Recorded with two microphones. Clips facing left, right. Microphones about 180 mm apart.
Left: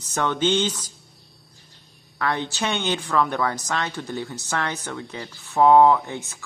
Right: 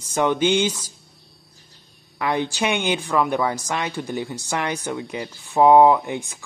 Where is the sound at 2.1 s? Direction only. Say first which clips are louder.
Right 3 dB; 10° right (ahead or behind).